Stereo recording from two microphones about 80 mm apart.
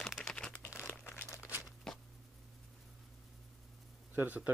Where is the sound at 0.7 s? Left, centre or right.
Left.